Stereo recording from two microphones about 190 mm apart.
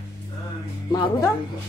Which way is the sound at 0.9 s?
15° left (ahead or behind).